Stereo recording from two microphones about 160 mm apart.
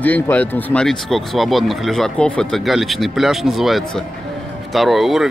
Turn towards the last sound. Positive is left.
turn(degrees=0)  # may be behind; listen again after turning